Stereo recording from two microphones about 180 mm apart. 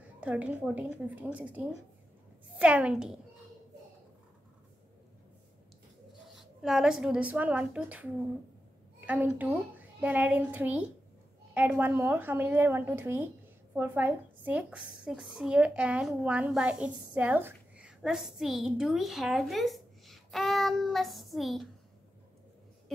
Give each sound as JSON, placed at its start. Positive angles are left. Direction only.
{"t": 0.2, "sound": "a child's voice", "side_deg": -10}
{"t": 2.6, "sound": "a child's voice", "side_deg": -5}
{"t": 6.3, "sound": "a woman's voice", "side_deg": 0}